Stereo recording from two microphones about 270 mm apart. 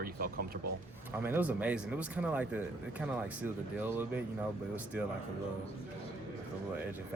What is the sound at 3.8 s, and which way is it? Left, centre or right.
Speech, centre.